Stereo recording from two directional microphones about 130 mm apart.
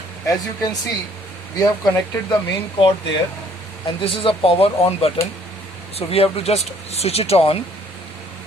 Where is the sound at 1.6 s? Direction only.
30° left (ahead or behind).